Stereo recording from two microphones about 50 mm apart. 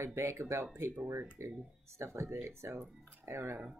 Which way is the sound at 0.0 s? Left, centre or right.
Right.